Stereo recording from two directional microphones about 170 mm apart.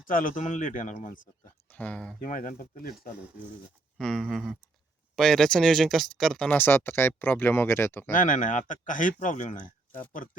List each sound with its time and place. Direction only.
0.0 s speech: 55° left (ahead or behind)
1.7 s speech: 10° left (ahead or behind)
2.2 s speech: 50° left (ahead or behind)
3.9 s a sound: 5° left (ahead or behind)
5.1 s speech: 5° left (ahead or behind)
8.1 s speech: 50° left (ahead or behind)